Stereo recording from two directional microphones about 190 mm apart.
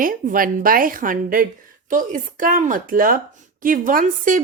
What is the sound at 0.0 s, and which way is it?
Speech, 45° right (ahead or behind).